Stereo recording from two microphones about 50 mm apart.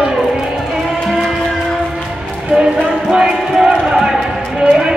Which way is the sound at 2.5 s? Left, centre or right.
Right.